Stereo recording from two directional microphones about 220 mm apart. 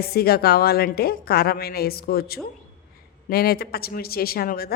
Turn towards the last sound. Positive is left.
turn(degrees=45)  # may be behind; listen again after turning